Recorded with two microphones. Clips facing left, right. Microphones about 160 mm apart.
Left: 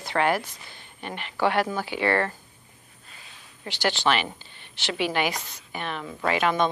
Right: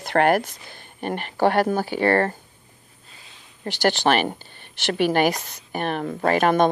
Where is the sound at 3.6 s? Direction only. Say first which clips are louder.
Right 5 dB; 50° right (ahead or behind).